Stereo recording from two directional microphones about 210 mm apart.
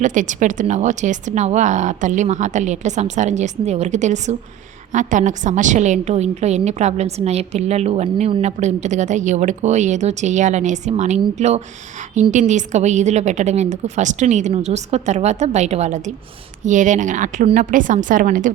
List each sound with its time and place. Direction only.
0.0 s a woman's voice: 35° right (ahead or behind)